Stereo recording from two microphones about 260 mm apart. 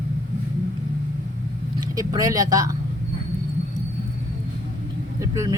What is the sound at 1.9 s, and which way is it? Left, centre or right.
Speech, centre.